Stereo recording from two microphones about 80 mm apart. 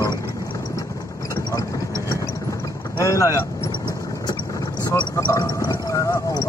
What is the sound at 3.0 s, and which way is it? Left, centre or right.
Speech, left.